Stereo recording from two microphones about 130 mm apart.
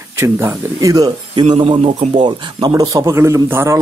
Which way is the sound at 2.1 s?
35° right (ahead or behind).